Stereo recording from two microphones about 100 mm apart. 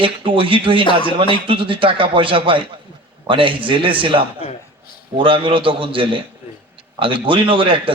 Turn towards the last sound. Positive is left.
turn(degrees=-55)  # may be behind; listen again after turning